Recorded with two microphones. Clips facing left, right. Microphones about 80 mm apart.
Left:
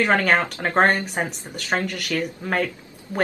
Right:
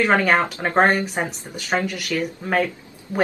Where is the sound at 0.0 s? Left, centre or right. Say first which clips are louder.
Right 1 dB; centre.